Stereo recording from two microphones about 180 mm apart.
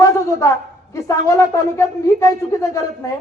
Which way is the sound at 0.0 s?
15° left (ahead or behind).